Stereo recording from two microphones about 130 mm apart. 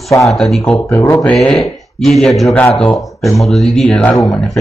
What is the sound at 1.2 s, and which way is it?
Speech, 5° left (ahead or behind).